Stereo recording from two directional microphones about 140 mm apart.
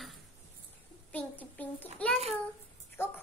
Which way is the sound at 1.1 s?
10° left (ahead or behind).